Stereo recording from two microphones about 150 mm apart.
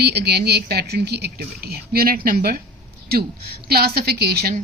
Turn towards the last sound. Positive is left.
turn(degrees=-90)